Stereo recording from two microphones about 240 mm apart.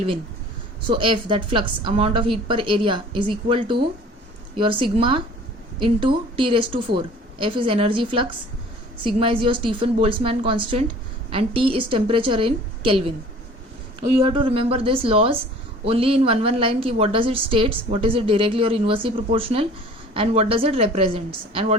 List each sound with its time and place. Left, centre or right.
0.8 s a woman's voice: right
14.2 s a woman's voice: centre